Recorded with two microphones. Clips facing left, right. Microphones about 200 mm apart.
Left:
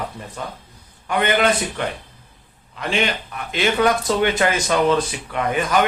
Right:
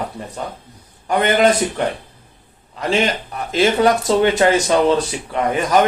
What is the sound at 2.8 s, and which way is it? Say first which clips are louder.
A man's voice: right 4 dB; 40° right (ahead or behind).